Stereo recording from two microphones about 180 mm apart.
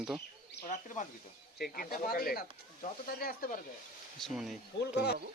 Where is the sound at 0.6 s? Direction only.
45° left (ahead or behind).